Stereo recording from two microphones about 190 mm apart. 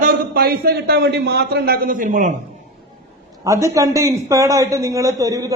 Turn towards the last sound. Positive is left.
turn(degrees=-15)  # may be behind; listen again after turning